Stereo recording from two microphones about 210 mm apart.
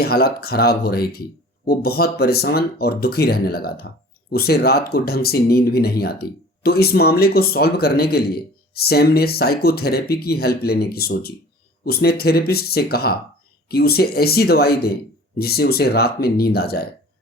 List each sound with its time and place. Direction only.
0.0 s speech: 45° left (ahead or behind)